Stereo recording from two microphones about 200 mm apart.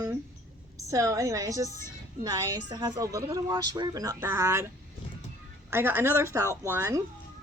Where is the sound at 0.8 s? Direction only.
15° right (ahead or behind).